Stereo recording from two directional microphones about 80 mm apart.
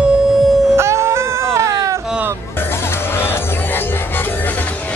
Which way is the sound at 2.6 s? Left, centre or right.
Left.